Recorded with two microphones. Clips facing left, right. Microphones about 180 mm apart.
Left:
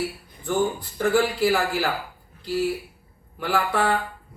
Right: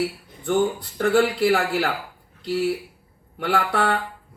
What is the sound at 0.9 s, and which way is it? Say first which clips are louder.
A man's voice: right 2 dB; 65° right (ahead or behind).